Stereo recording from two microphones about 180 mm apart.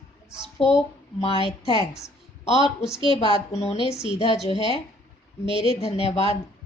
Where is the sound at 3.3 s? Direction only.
35° left (ahead or behind).